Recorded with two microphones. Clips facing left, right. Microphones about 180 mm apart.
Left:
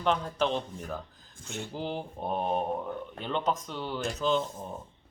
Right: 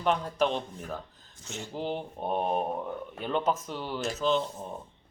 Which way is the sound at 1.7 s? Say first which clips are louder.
Right 3 dB; centre (ahead or behind).